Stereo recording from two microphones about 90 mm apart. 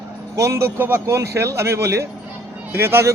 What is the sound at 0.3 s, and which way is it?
A man's voice, 35° right (ahead or behind).